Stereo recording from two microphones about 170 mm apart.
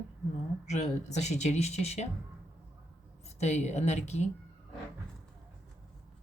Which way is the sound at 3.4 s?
40° left (ahead or behind).